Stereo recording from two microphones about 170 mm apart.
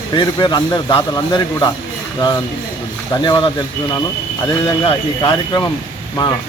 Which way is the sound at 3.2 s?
25° left (ahead or behind).